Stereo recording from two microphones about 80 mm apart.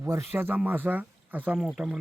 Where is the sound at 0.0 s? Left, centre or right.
Right.